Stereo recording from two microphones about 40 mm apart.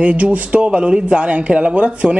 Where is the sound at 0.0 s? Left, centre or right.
Right.